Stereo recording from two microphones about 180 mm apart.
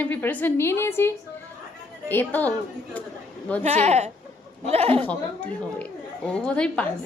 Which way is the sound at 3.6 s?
40° right (ahead or behind).